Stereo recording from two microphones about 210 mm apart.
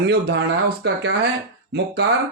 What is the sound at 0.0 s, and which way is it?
A man's voice, 55° right (ahead or behind).